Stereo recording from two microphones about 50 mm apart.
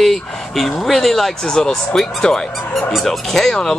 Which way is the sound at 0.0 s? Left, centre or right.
Centre.